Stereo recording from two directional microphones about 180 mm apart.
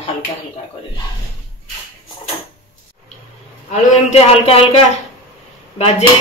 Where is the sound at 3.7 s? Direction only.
35° left (ahead or behind).